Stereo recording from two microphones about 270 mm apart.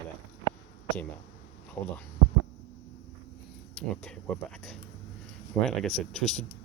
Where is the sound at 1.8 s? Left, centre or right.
Centre.